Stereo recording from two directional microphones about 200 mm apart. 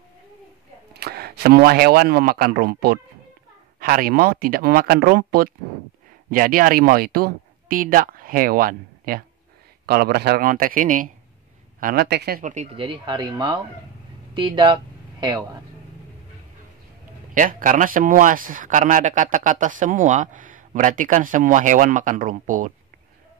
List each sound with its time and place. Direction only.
0.9 s speech: 50° right (ahead or behind)
12.7 s speech: 25° right (ahead or behind)
17.3 s speech: 40° right (ahead or behind)